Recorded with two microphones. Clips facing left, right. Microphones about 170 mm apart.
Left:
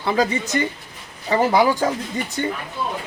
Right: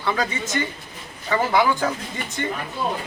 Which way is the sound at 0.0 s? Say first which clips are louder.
Left 4 dB; 35° left (ahead or behind).